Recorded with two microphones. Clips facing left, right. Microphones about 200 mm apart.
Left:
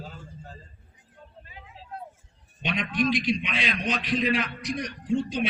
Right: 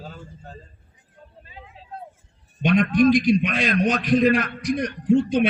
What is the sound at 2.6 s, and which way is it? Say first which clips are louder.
A man's voice: right 10 dB; 45° right (ahead or behind).